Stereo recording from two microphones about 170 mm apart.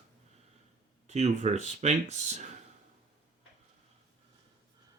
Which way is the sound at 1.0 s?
40° right (ahead or behind).